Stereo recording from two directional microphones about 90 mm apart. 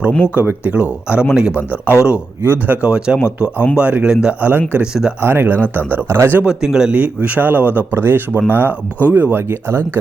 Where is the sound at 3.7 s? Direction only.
15° right (ahead or behind).